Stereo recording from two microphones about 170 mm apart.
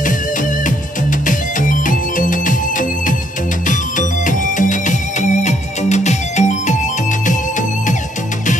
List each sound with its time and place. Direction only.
1.2 s music: 50° left (ahead or behind)
4.3 s music: 50° left (ahead or behind)